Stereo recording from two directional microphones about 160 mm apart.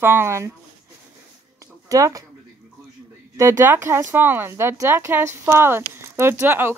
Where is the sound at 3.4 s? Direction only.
15° right (ahead or behind).